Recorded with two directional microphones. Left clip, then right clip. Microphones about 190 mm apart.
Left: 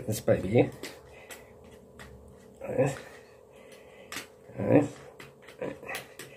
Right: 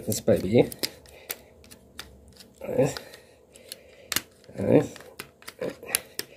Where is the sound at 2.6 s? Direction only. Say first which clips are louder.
Right 3 dB; 45° right (ahead or behind).